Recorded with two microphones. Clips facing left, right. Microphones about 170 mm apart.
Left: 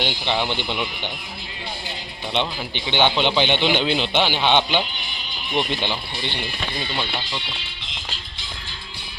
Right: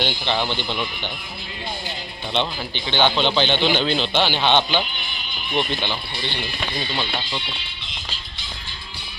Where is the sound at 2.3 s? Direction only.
10° left (ahead or behind).